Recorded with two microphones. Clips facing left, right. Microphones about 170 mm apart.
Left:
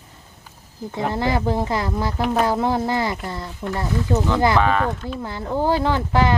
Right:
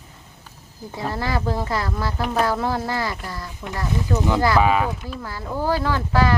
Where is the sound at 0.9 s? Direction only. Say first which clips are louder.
Left 4 dB; 20° left (ahead or behind).